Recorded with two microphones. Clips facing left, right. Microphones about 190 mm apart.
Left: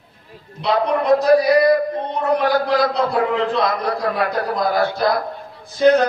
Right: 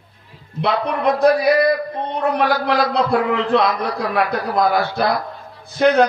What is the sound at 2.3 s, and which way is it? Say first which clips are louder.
A man's voice: left 3 dB; 55° right (ahead or behind).